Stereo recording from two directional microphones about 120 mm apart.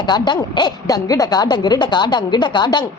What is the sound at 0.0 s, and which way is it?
Speech, 40° left (ahead or behind).